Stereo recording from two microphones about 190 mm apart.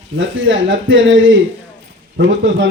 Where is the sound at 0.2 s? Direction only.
85° right.